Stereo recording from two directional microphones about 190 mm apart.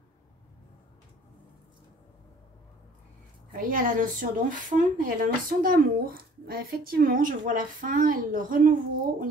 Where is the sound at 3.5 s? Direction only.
45° right (ahead or behind).